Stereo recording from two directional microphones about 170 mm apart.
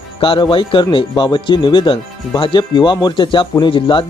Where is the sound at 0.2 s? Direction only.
30° left (ahead or behind).